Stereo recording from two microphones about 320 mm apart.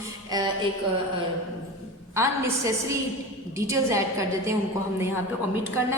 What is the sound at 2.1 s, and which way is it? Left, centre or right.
A woman's voice, centre.